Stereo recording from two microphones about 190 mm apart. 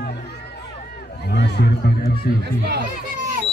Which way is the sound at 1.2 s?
60° left (ahead or behind).